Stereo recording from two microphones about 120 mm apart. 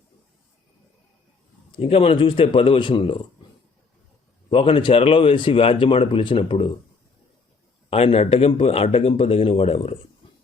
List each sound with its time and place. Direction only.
1.7 s a man's voice: 55° left (ahead or behind)
4.4 s a man's voice: 50° left (ahead or behind)
7.9 s speech: 55° left (ahead or behind)